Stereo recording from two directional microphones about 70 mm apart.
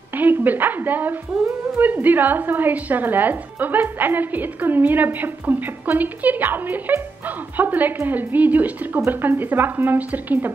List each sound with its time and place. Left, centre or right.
0.1 s a woman's voice: right